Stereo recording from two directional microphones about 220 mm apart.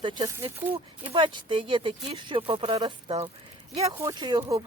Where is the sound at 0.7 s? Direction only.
25° right (ahead or behind).